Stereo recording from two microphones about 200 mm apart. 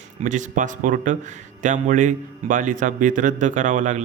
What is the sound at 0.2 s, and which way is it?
Speech, 40° right (ahead or behind).